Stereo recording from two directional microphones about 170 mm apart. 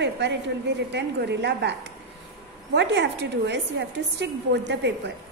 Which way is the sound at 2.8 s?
90° right.